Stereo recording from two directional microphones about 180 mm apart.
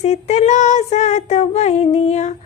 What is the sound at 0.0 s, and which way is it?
Child singing, 40° left (ahead or behind).